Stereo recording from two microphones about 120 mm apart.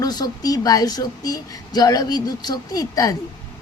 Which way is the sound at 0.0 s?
35° left (ahead or behind).